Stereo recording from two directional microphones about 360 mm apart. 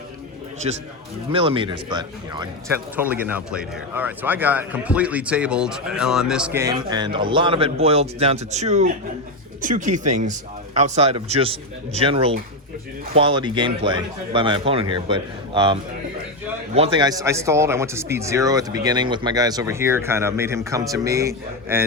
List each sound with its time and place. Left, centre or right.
0.7 s speech: centre